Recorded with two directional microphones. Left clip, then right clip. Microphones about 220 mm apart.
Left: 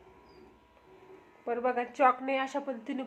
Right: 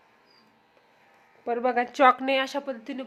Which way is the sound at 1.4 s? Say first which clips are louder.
Right 5 dB; 45° right (ahead or behind).